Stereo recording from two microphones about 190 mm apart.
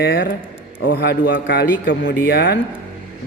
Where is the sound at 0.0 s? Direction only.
60° left (ahead or behind).